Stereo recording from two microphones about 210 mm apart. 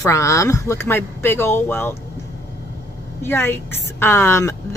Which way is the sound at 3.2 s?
10° left (ahead or behind).